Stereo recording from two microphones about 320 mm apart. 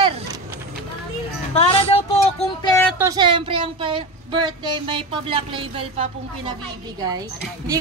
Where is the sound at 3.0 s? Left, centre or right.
Centre.